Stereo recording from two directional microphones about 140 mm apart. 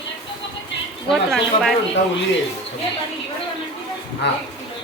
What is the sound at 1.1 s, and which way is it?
Speech, centre (ahead or behind).